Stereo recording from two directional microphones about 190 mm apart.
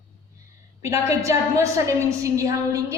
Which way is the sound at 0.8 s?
15° right (ahead or behind).